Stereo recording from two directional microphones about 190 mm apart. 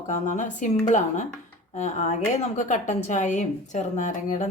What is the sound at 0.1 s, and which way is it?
A woman's voice, 40° left (ahead or behind).